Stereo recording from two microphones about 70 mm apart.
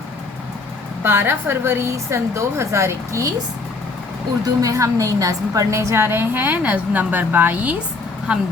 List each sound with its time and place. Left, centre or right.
1.0 s a woman's voice: right
4.6 s a woman's voice: right; by 8.4 s centre